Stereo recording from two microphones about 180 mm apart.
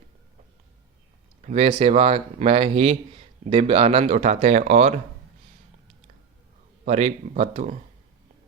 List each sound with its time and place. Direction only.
1.4 s speech: 35° right (ahead or behind)
6.8 s speech: 35° right (ahead or behind)